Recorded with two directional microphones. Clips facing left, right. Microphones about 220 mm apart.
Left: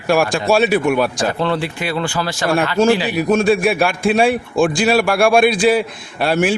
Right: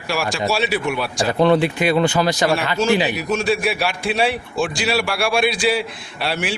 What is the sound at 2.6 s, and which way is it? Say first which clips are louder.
A man's voice: left 4 dB; 50° left (ahead or behind).